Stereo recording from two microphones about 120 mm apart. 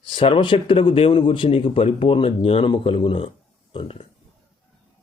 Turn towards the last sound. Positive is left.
turn(degrees=50)  # may be behind; listen again after turning